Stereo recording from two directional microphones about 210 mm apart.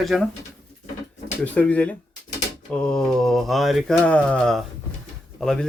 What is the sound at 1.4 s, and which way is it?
Speech, 5° left (ahead or behind).